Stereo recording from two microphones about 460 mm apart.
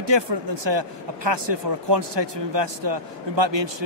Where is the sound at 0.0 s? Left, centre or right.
Right.